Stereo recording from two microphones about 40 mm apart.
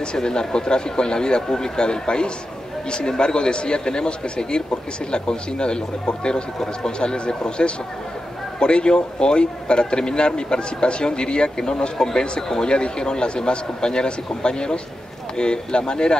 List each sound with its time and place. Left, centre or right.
0.0 s a man's voice: left